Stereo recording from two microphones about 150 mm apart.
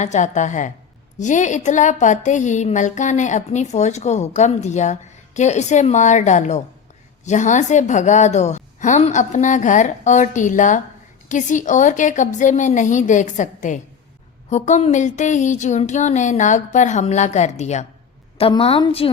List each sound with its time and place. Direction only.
0.0 s a woman's voice: 50° left (ahead or behind)
18.3 s a woman's voice: 40° left (ahead or behind)